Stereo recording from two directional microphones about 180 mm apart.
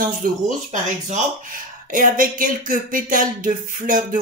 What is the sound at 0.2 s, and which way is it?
Speech, 50° right (ahead or behind).